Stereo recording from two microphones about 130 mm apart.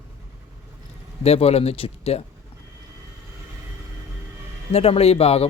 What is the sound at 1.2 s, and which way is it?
Speech, 50° left (ahead or behind).